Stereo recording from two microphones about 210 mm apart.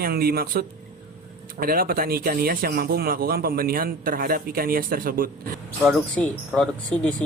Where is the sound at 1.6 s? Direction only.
45° right (ahead or behind).